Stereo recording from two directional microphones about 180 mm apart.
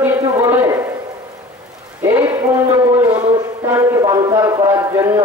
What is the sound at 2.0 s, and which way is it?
A man's voice, 15° right (ahead or behind).